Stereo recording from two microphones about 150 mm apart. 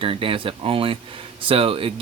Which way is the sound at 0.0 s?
35° right (ahead or behind).